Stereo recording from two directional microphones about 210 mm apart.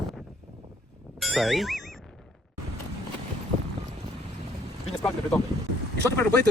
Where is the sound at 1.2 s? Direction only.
Centre (ahead or behind).